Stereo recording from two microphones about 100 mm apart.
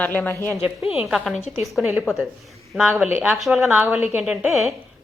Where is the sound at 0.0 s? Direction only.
15° left (ahead or behind).